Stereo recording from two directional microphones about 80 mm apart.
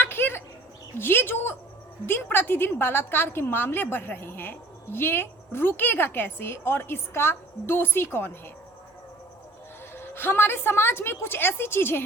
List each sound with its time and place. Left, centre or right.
0.0 s a sound: left
0.9 s a woman's voice: left
9.9 s a woman's voice: left